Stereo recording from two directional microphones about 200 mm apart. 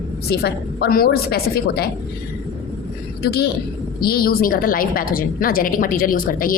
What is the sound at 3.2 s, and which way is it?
A woman's voice, 55° left (ahead or behind).